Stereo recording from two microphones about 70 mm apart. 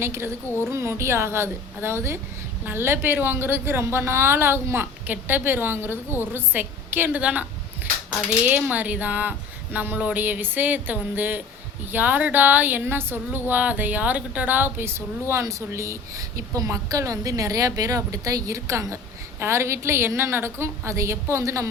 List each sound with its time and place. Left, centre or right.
0.0 s a woman's voice: right
7.2 s speech: centre
8.4 s a woman's voice: right